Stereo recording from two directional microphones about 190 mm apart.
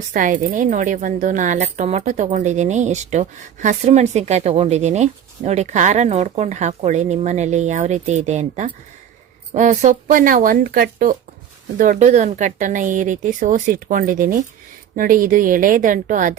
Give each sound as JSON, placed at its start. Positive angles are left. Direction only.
{"t": 0.1, "sound": "a woman's voice", "side_deg": -45}